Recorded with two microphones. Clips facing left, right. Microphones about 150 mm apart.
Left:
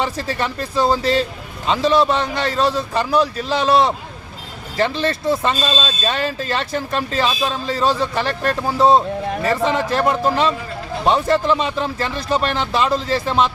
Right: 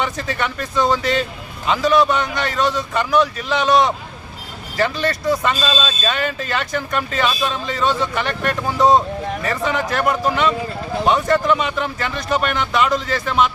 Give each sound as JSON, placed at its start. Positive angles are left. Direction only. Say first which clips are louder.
{"t": 0.0, "sound": "speech", "louder": "left 1 dB", "side_deg": 30}